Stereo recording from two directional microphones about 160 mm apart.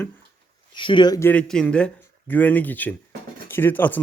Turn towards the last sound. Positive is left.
turn(degrees=10)  # may be behind; listen again after turning